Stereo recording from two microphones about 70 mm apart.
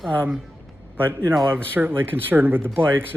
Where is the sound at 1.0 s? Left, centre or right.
Right.